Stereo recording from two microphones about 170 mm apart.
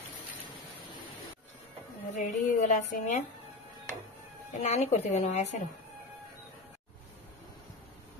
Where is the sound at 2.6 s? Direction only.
45° left (ahead or behind).